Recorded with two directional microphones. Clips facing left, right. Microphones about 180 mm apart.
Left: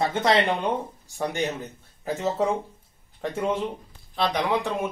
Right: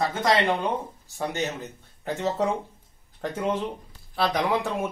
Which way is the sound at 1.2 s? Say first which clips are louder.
Left 2 dB; 15° left (ahead or behind).